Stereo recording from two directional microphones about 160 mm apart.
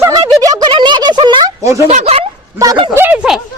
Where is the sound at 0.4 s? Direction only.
25° right (ahead or behind).